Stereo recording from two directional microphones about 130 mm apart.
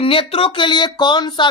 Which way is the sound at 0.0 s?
45° left (ahead or behind).